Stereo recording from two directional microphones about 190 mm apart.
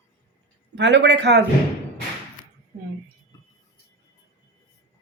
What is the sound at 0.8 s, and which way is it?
Speech, 70° right (ahead or behind).